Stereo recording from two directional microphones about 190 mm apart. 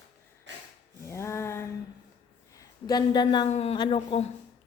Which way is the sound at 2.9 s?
20° left (ahead or behind).